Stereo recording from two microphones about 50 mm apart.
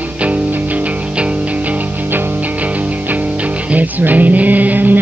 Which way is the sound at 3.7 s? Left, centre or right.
Right.